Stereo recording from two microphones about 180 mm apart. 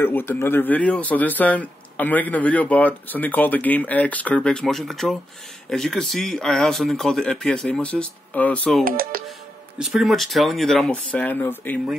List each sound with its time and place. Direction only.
0.0 s speech: 10° left (ahead or behind)
8.8 s speech: 50° right (ahead or behind)
9.8 s speech: centre (ahead or behind)